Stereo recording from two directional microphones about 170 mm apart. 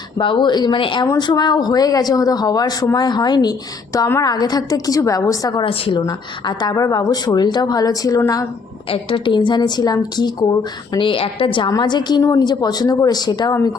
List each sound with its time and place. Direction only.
0.2 s a woman's voice: 30° left (ahead or behind)
8.9 s a woman's voice: 30° left (ahead or behind)